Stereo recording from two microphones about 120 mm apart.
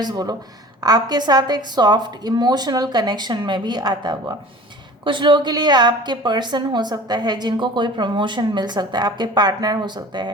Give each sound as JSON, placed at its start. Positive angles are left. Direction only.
{"t": 0.0, "sound": "a woman's voice", "side_deg": -35}